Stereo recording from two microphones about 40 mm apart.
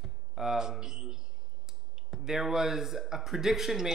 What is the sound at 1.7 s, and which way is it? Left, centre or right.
Speech, centre.